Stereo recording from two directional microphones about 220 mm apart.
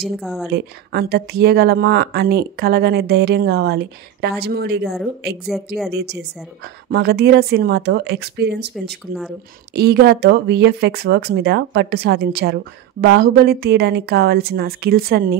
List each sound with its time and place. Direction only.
0.2 s a woman's voice: centre (ahead or behind)
0.5 s speech: 45° right (ahead or behind)